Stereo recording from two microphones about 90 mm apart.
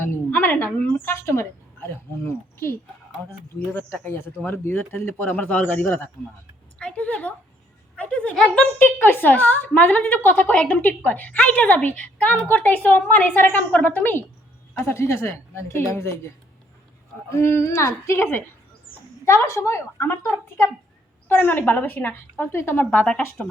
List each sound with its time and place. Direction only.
0.0 s a woman's voice: 20° left (ahead or behind)
17.2 s a woman's voice: 30° left (ahead or behind)
21.2 s a woman's voice: 25° left (ahead or behind)